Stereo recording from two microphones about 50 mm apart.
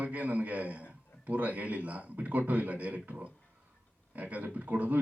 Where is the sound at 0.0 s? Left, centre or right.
Right.